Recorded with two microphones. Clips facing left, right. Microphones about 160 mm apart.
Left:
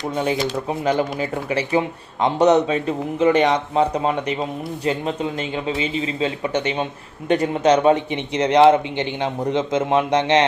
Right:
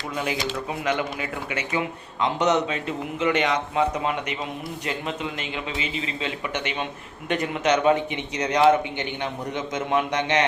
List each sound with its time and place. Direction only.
0.1 s a man's voice: 30° left (ahead or behind)